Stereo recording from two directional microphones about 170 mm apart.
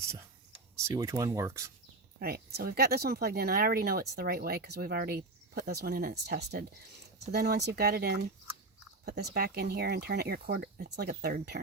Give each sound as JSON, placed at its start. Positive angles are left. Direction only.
{"t": 0.9, "sound": "speech", "side_deg": -20}
{"t": 2.1, "sound": "speech", "side_deg": -65}